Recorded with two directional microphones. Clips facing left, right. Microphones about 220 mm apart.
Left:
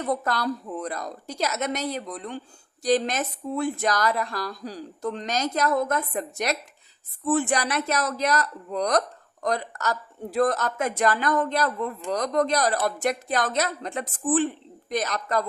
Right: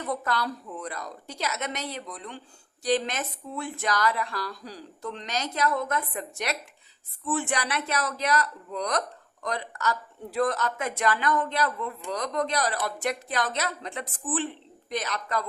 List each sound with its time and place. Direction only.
0.0 s speech: 40° left (ahead or behind)